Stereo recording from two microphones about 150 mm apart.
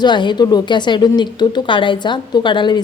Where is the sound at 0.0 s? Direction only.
30° left (ahead or behind).